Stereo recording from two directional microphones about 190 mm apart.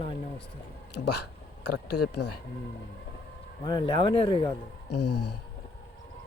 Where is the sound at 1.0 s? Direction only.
60° left (ahead or behind).